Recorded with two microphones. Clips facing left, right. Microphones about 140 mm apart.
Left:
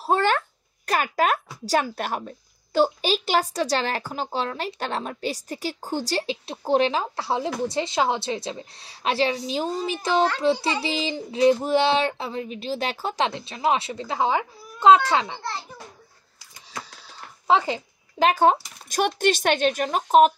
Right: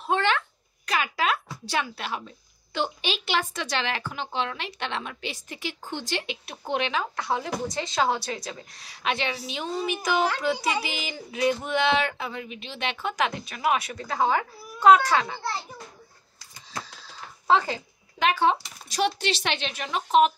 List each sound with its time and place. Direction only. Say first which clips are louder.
0.0 s a sound: left 3 dB; 40° left (ahead or behind)
0.8 s speech: left 4 dB; 45° left (ahead or behind); by 15.4 s 20° left (ahead or behind)
17.5 s speech: left 2 dB; 20° left (ahead or behind)
18.2 s speech: left 4 dB; 40° left (ahead or behind)